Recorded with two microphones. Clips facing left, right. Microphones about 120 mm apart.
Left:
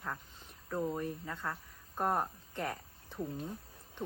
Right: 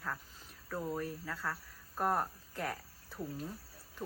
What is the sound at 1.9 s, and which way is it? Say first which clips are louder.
Speech: even; centre (ahead or behind).